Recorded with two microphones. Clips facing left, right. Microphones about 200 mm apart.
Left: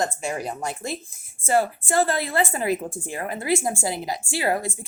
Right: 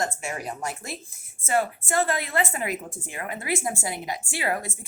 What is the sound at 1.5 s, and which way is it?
Speech, 30° left (ahead or behind).